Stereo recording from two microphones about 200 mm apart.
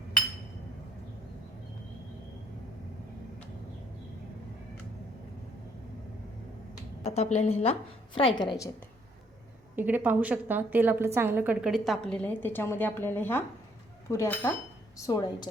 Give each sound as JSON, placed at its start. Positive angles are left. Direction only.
{"t": 7.0, "sound": "a woman's voice", "side_deg": 30}
{"t": 9.7, "sound": "a woman's voice", "side_deg": -10}